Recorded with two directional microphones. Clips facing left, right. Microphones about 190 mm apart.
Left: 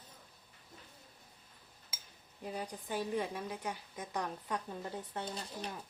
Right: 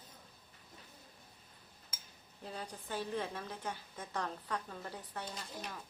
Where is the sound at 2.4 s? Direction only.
15° left (ahead or behind); by 5.7 s 30° left (ahead or behind).